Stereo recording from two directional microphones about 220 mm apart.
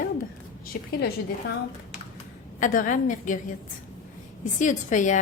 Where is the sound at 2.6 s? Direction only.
35° left (ahead or behind).